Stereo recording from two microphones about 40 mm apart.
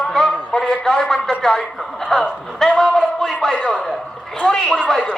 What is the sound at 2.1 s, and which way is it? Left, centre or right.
Speech, centre.